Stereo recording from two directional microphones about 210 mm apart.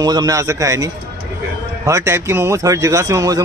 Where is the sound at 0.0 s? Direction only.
20° right (ahead or behind).